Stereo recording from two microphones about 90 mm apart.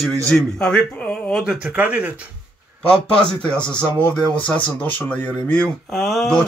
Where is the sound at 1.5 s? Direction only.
10° right (ahead or behind).